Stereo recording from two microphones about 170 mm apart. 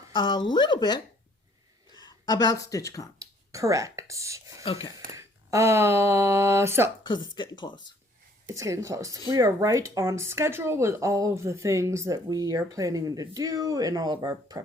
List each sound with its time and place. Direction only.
0.1 s speech: 25° left (ahead or behind)
3.2 s speech: 20° right (ahead or behind)
4.6 s speech: 35° left (ahead or behind)
5.1 s speech: 20° right (ahead or behind)
7.0 s speech: 25° left (ahead or behind)
8.5 s speech: 20° right (ahead or behind)